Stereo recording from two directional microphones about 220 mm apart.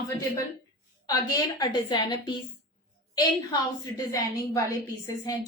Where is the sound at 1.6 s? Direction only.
20° left (ahead or behind).